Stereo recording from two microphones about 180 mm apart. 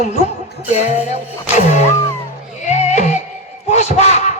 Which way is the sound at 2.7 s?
40° left (ahead or behind).